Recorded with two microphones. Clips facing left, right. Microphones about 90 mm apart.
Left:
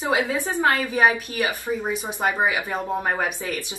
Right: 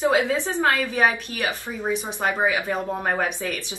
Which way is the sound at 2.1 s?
20° left (ahead or behind).